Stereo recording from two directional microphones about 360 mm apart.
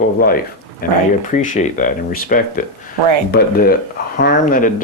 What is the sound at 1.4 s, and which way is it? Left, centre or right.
Speech, left.